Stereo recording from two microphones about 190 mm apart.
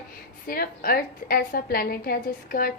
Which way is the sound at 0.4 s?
50° left (ahead or behind).